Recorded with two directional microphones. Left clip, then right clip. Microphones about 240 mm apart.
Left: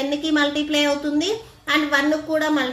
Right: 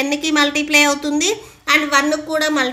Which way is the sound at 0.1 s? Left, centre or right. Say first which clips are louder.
Right 3 dB; right.